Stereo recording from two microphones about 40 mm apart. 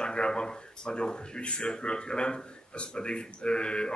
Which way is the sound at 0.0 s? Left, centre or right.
Left.